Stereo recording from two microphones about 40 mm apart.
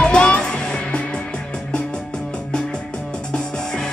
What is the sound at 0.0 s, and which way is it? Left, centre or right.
Music, left.